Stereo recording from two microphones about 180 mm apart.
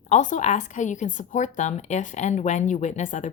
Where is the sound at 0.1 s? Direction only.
45° left (ahead or behind).